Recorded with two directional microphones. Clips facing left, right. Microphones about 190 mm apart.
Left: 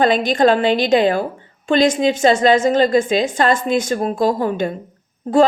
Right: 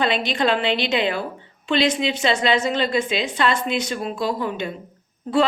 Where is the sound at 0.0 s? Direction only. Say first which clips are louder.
Left 7 dB; 45° left (ahead or behind).